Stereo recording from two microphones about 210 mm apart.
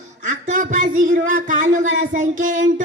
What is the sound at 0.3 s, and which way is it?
Speech, 40° right (ahead or behind).